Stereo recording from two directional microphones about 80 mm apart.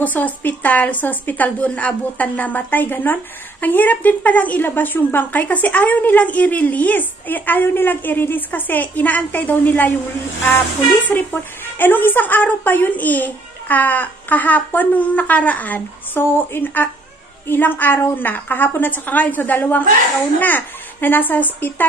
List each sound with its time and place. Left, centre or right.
0.0 s a woman's voice: left
11.3 s a woman's voice: left